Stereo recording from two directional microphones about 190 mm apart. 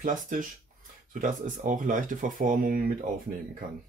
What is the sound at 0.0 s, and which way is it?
Speech, 45° right (ahead or behind).